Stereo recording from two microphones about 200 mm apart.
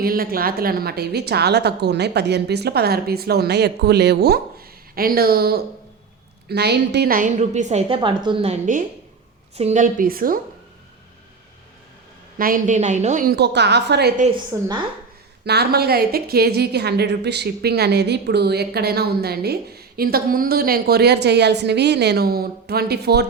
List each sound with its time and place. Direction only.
0.0 s a woman's voice: 45° right (ahead or behind); by 8.5 s 25° right (ahead or behind)
9.6 s a woman's voice: 35° right (ahead or behind)
12.4 s a woman's voice: 45° right (ahead or behind)
14.5 s a woman's voice: 10° right (ahead or behind)
15.4 s a woman's voice: 55° right (ahead or behind)